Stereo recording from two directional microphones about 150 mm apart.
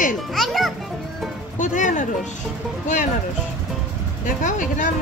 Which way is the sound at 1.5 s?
55° left (ahead or behind).